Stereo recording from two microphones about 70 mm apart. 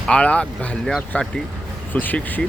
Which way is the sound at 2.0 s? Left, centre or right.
Left.